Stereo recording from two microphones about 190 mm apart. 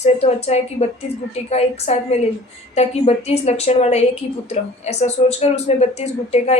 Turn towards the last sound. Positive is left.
turn(degrees=35)  # may be behind; listen again after turning